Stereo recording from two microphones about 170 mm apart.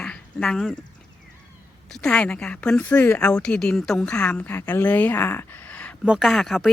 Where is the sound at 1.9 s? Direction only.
5° left (ahead or behind).